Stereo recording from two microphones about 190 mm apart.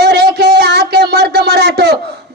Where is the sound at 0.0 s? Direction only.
60° right (ahead or behind).